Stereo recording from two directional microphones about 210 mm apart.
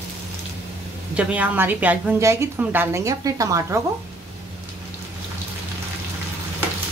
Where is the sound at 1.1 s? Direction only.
5° right (ahead or behind).